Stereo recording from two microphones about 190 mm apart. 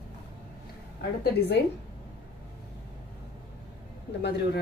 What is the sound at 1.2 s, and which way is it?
Speech, 60° left (ahead or behind).